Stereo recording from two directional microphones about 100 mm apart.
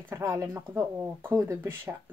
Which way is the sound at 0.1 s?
30° right (ahead or behind).